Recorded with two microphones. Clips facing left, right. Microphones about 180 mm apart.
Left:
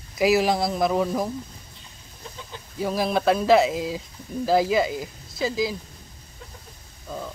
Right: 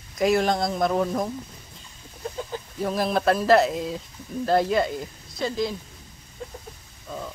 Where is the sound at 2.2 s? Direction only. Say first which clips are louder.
Right 9 dB; 50° right (ahead or behind).